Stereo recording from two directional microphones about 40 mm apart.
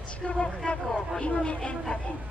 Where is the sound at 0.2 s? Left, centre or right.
Left.